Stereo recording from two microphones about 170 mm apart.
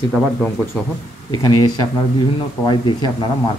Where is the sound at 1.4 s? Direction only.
25° left (ahead or behind).